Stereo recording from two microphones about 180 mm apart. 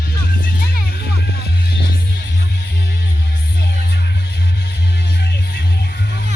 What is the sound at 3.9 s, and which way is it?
Music, 65° left (ahead or behind).